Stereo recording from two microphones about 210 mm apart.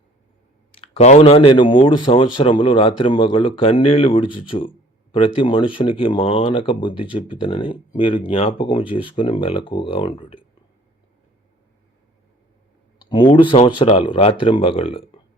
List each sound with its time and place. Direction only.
0.9 s speech: 30° left (ahead or behind)
13.0 s speech: 20° left (ahead or behind)